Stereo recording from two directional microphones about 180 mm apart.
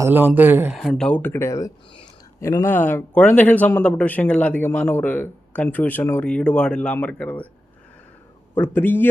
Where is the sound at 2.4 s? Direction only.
15° left (ahead or behind).